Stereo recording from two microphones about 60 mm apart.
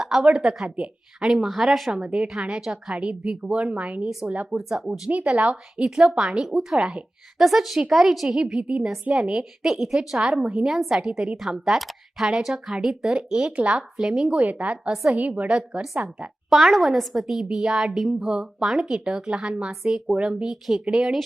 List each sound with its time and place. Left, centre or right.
0.0 s a woman's voice: centre
2.0 s a woman's voice: centre
4.5 s a woman's voice: centre
5.1 s a woman's voice: right
5.7 s a woman's voice: centre
13.9 s a woman's voice: centre
14.3 s a woman's voice: right
14.8 s a woman's voice: centre
15.1 s a woman's voice: right
19.8 s a woman's voice: centre